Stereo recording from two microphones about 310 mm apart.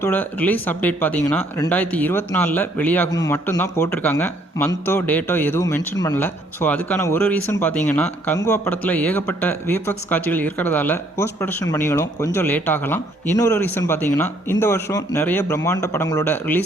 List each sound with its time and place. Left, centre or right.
0.0 s speech: centre